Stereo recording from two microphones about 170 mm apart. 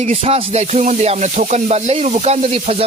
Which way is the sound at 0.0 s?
35° right (ahead or behind).